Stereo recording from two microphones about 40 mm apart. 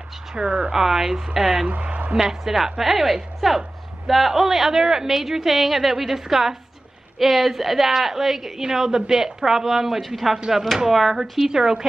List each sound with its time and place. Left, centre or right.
0.3 s a woman's voice: centre
1.7 s speech: right
2.1 s a woman's voice: centre
10.3 s a woman's voice: centre